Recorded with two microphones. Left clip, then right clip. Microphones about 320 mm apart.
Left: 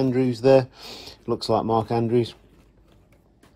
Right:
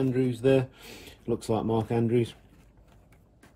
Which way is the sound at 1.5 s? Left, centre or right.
Left.